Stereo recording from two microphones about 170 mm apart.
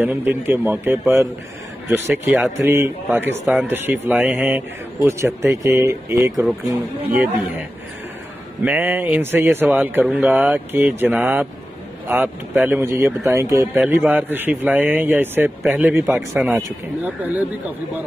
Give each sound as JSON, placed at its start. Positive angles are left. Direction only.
{"t": 0.0, "sound": "speech", "side_deg": -10}
{"t": 8.6, "sound": "speech", "side_deg": -10}
{"t": 12.5, "sound": "speech", "side_deg": -10}